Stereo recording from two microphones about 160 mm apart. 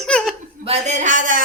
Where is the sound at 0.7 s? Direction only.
45° right (ahead or behind).